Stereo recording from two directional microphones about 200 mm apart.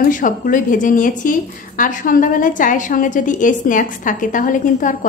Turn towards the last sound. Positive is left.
turn(degrees=40)  # may be behind; listen again after turning